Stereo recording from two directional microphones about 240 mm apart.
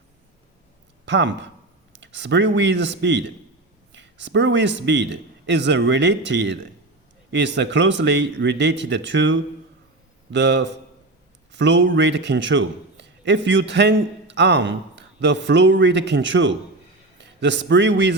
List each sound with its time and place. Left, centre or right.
1.0 s a man's voice: right